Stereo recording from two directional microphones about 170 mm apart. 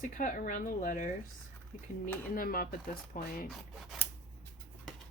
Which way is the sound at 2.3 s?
60° left (ahead or behind).